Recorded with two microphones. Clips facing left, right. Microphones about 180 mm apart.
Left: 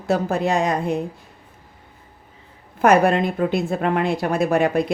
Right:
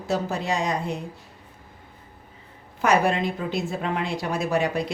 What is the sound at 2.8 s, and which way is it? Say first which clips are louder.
Speech: left 6 dB; 55° left (ahead or behind).